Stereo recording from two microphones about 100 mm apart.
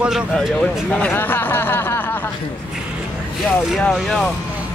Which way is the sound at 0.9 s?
20° left (ahead or behind).